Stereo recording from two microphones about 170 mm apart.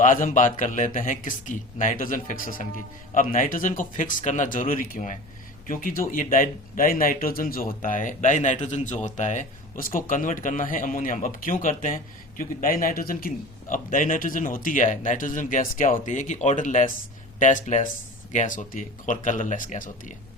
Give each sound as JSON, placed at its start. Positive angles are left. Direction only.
{"t": 0.0, "sound": "speech", "side_deg": 50}